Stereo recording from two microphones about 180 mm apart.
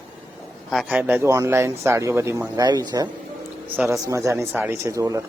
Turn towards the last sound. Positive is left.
turn(degrees=-15)  # may be behind; listen again after turning